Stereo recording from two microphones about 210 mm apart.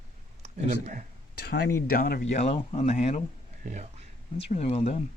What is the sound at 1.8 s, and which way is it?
Speech, 45° left (ahead or behind).